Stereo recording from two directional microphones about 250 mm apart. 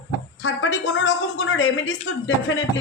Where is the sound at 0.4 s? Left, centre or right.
Left.